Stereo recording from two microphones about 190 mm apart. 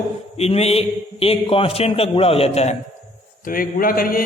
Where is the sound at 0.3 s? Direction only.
35° left (ahead or behind).